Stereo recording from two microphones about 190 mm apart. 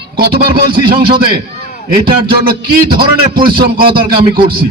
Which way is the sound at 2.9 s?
50° right (ahead or behind).